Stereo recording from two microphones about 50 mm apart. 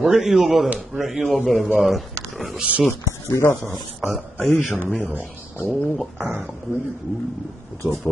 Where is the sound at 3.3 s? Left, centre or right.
Left.